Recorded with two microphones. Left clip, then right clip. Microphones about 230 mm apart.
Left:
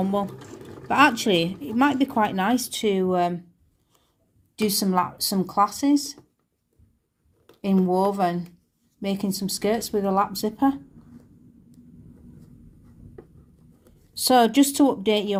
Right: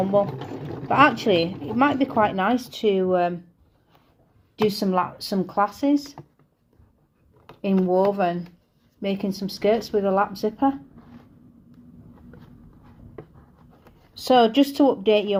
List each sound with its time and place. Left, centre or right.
0.0 s speech: left
4.5 s speech: left
7.6 s speech: left
14.1 s speech: left